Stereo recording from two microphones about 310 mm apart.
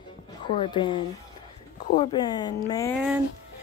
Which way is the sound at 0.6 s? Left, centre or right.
Centre.